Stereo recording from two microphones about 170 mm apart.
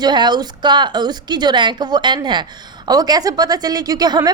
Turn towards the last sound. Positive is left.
turn(degrees=-25)  # may be behind; listen again after turning